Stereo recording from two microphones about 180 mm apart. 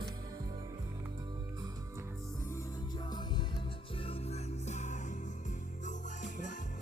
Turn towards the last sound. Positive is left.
turn(degrees=45)  # may be behind; listen again after turning